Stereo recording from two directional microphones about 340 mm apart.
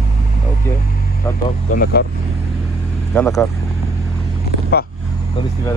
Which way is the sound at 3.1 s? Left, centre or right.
Centre.